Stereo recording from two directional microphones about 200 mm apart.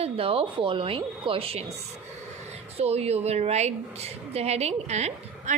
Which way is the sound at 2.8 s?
30° right (ahead or behind).